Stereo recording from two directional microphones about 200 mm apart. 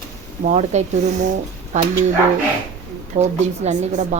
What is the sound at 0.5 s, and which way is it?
Speech, 35° right (ahead or behind).